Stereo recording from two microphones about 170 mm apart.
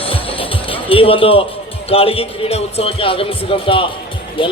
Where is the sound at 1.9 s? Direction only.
35° left (ahead or behind).